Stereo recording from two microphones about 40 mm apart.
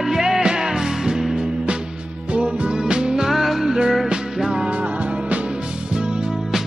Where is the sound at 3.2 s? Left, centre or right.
Centre.